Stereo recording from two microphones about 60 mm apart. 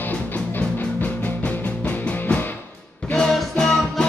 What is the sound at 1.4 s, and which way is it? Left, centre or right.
Music, left.